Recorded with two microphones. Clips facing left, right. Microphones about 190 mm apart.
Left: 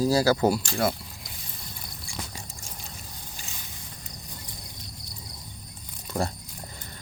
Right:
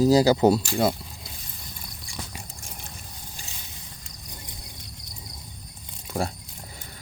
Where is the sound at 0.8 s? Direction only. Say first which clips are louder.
Right 3 dB; 25° right (ahead or behind).